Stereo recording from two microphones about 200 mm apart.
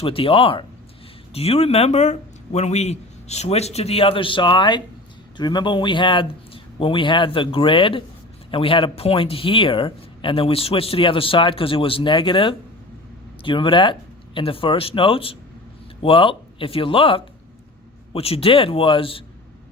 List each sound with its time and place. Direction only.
0.0 s speech: 25° left (ahead or behind)